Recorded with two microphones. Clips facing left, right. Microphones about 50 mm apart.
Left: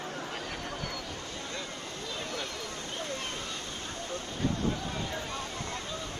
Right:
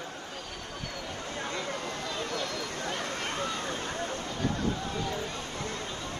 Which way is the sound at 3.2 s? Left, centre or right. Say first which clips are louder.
Right 5 dB; right.